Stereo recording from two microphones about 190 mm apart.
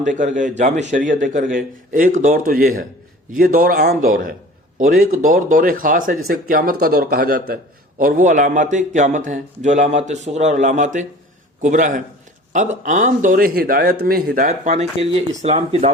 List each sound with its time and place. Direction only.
0.0 s speech: 40° right (ahead or behind)
14.4 s speech: 35° right (ahead or behind)